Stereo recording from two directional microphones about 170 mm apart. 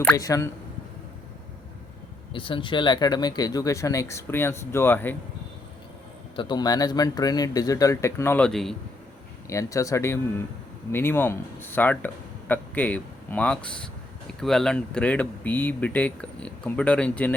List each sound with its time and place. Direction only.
0.2 s speech: 20° left (ahead or behind)
2.3 s speech: 30° left (ahead or behind); by 5.1 s 10° left (ahead or behind)
6.3 s speech: 30° left (ahead or behind); by 8.7 s 5° left (ahead or behind)
9.5 s a man's voice: 20° left (ahead or behind)